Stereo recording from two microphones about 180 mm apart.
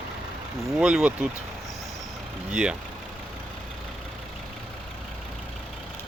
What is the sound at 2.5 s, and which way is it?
Speech, 5° right (ahead or behind).